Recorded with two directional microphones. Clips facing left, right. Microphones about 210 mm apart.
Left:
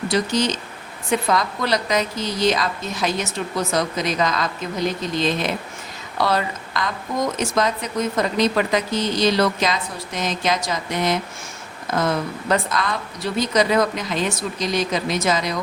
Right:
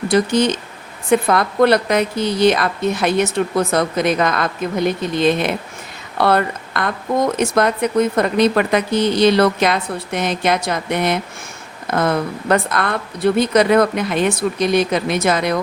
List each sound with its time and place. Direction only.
0.1 s speech: 55° right (ahead or behind)